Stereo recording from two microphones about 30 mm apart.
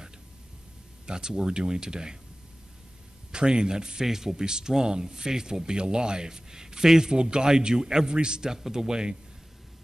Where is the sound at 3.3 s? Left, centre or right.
Right.